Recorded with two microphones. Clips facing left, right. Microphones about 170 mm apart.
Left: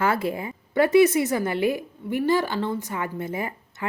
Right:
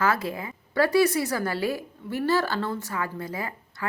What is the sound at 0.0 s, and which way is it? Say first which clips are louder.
A woman's voice: left 2 dB; 25° left (ahead or behind).